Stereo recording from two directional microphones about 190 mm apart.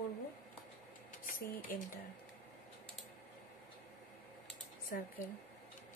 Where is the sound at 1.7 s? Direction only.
50° left (ahead or behind).